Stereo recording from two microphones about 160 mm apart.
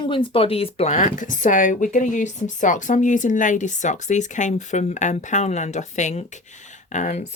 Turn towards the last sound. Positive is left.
turn(degrees=50)  # may be behind; listen again after turning